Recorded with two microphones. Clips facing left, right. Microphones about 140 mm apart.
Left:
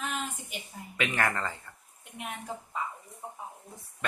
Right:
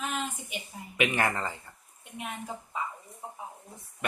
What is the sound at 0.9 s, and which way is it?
Speech, 15° right (ahead or behind).